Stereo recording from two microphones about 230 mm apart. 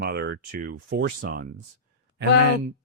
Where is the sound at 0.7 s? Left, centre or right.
Right.